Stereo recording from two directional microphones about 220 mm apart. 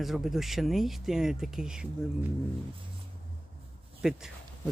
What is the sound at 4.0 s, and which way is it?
Speech, centre (ahead or behind).